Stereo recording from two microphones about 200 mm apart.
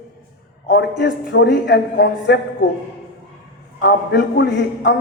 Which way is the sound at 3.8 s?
55° left (ahead or behind).